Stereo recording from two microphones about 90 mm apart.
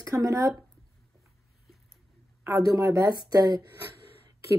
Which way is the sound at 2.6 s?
35° right (ahead or behind).